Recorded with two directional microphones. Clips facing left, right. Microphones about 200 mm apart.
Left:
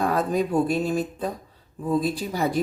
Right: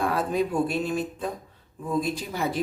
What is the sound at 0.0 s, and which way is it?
Speech, 40° left (ahead or behind).